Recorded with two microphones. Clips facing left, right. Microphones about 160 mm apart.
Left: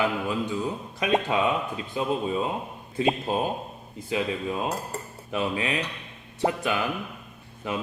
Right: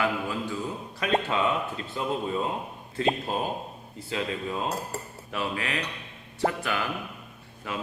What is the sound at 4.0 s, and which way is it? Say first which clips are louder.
A man's voice: left 3 dB; 15° left (ahead or behind).